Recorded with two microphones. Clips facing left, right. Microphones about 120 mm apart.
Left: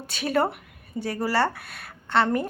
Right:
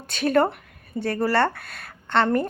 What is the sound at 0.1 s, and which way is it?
A woman's voice, 5° left (ahead or behind).